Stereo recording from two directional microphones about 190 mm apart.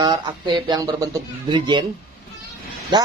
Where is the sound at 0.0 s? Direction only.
25° right (ahead or behind).